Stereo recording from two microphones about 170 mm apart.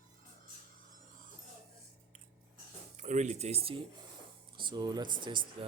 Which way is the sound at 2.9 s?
45° right (ahead or behind).